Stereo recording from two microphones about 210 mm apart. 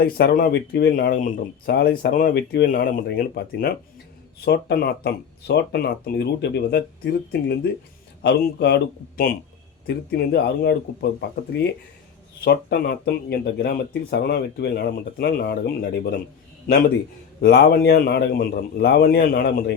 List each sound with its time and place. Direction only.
0.0 s speech: 50° left (ahead or behind)
17.4 s speech: 50° left (ahead or behind)